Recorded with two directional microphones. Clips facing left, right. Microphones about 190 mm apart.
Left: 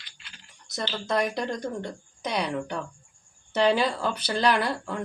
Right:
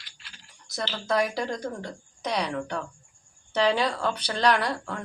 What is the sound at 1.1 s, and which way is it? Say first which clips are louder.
Speech: right 1 dB; centre (ahead or behind).